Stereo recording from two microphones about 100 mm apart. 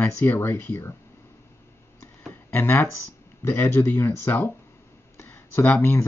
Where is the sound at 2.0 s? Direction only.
20° left (ahead or behind).